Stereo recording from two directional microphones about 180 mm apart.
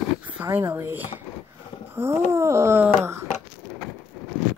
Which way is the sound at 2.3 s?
15° right (ahead or behind).